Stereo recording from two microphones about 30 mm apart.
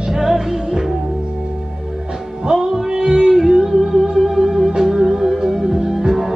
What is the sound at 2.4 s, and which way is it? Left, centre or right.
Music, right.